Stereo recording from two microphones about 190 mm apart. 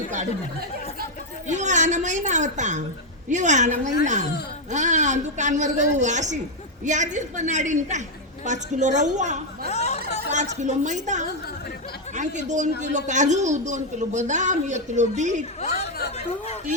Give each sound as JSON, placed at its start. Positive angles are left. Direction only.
{"t": 1.5, "sound": "a man's voice", "side_deg": -40}
{"t": 9.6, "sound": "a sound", "side_deg": 35}
{"t": 10.3, "sound": "a man's voice", "side_deg": -40}